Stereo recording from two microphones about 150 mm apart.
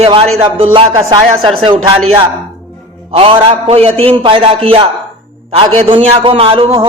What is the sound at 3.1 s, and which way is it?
A man's voice, 35° right (ahead or behind).